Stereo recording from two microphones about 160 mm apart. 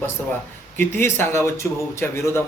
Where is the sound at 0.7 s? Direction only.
15° left (ahead or behind).